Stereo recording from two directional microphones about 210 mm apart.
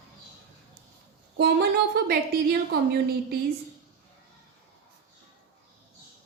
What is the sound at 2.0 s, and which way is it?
A woman's voice, 45° right (ahead or behind).